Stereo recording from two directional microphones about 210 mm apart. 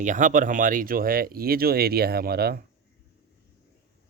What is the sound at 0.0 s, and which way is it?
Speech, 35° right (ahead or behind).